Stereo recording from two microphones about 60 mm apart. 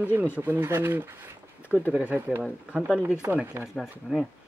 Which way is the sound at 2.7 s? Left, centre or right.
Right.